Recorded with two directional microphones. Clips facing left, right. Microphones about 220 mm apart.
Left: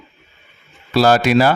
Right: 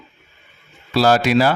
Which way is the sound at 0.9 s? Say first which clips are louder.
Left 2 dB; 55° left (ahead or behind).